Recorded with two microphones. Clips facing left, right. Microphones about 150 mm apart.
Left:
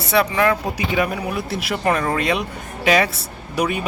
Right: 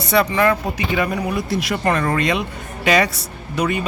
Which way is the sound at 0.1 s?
5° left (ahead or behind).